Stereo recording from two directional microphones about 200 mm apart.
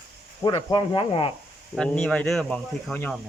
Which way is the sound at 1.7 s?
5° left (ahead or behind).